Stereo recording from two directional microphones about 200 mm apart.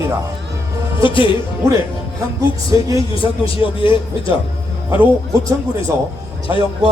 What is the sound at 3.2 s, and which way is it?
Speech, 25° left (ahead or behind).